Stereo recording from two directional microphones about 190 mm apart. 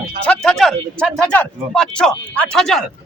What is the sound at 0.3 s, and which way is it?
Speech, 5° left (ahead or behind).